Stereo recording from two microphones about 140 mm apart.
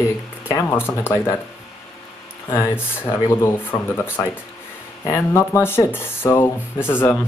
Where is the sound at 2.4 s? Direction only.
20° left (ahead or behind).